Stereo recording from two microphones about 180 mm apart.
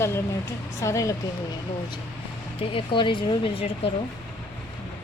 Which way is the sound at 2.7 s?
30° left (ahead or behind).